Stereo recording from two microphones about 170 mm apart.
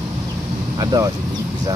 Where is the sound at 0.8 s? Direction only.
20° right (ahead or behind).